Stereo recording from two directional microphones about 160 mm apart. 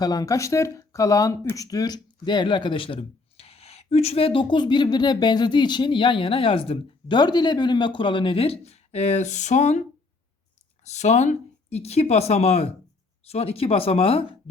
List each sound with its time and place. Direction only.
0.0 s speech: 25° left (ahead or behind); by 9.8 s 45° left (ahead or behind)
10.8 s speech: 45° left (ahead or behind)